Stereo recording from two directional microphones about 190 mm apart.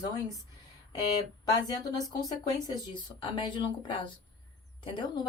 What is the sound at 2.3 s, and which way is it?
Speech, 20° left (ahead or behind).